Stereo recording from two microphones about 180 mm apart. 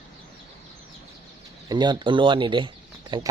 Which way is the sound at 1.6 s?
25° right (ahead or behind).